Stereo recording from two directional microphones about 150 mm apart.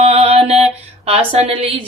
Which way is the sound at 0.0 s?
45° right (ahead or behind).